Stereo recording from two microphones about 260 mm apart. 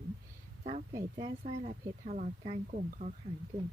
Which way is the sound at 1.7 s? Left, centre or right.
Right.